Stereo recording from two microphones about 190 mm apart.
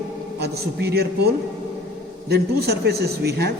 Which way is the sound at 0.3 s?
60° right (ahead or behind).